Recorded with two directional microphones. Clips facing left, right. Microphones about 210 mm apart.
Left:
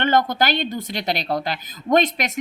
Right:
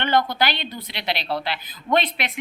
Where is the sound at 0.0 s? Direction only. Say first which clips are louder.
Left 2 dB; 45° left (ahead or behind).